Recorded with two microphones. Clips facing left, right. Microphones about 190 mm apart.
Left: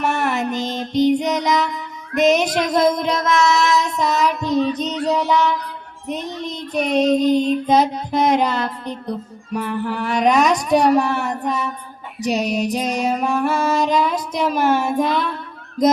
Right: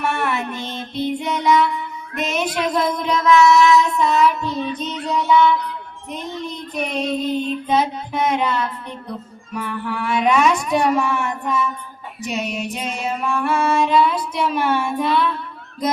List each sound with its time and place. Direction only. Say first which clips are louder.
0.0 s music: left 2 dB; 40° left (ahead or behind)
6.1 s child singing: left 3 dB; 40° left (ahead or behind)